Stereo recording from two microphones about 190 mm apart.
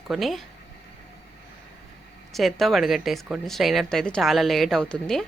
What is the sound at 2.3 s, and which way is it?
Speech, centre (ahead or behind).